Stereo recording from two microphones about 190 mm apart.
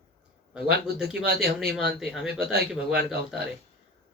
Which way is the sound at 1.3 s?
55° right (ahead or behind).